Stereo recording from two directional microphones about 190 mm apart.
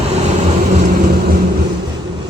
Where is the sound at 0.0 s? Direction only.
35° right (ahead or behind).